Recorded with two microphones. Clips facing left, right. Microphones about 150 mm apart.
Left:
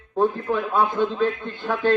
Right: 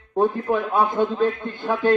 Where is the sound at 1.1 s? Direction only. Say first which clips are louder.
Right 2 dB; 5° right (ahead or behind).